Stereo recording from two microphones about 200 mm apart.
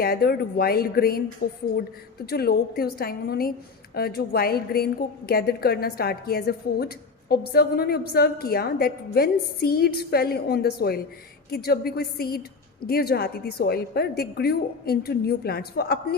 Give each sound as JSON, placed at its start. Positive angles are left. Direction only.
{"t": 0.0, "sound": "a woman's voice", "side_deg": 50}